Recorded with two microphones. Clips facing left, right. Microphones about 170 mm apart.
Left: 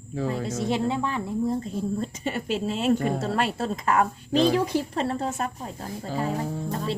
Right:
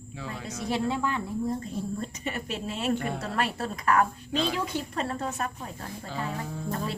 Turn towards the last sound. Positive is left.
turn(degrees=35)  # may be behind; listen again after turning